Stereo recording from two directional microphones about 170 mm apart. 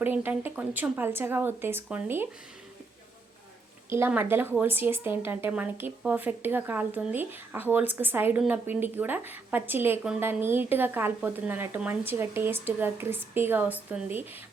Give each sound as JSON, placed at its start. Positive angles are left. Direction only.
{"t": 0.0, "sound": "speech", "side_deg": -10}
{"t": 3.8, "sound": "speech", "side_deg": -15}